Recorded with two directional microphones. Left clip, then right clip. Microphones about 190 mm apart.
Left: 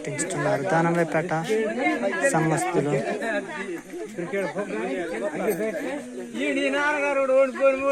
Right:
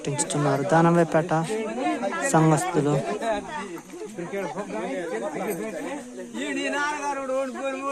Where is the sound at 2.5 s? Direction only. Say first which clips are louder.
Even; 20° right (ahead or behind).